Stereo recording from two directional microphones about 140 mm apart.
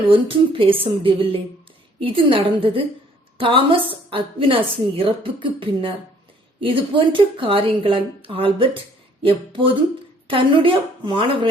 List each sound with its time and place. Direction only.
0.1 s a woman's voice: 40° right (ahead or behind)